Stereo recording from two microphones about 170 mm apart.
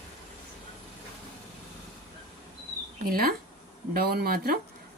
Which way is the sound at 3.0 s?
60° right (ahead or behind).